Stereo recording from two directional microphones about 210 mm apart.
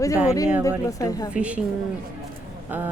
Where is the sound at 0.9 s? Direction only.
15° left (ahead or behind).